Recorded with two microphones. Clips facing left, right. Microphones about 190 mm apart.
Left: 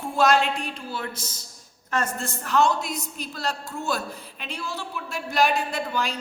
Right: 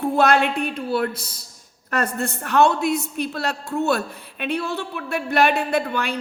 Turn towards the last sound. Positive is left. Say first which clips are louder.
# right 5 dB
turn(degrees=-60)  # may be behind; listen again after turning